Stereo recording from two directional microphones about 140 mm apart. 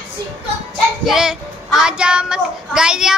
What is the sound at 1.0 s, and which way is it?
Speech, 5° right (ahead or behind).